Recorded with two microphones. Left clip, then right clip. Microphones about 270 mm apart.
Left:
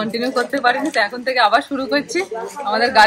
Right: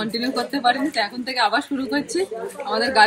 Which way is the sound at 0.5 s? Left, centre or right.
Centre.